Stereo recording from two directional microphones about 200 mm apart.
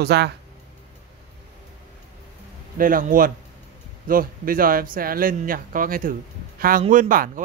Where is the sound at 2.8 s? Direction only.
45° right (ahead or behind).